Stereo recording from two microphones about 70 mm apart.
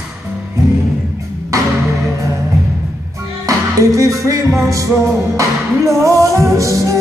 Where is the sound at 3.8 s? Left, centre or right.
Right.